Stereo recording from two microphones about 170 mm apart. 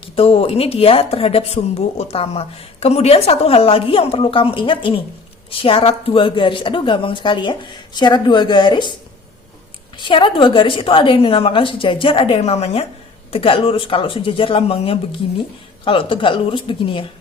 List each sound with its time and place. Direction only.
0.0 s a woman's voice: 35° left (ahead or behind)
10.0 s speech: 30° left (ahead or behind)